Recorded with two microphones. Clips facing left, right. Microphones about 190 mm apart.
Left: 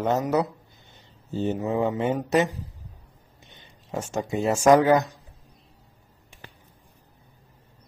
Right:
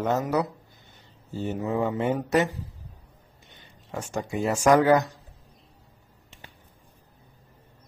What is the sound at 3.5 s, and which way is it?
Speech, 20° left (ahead or behind).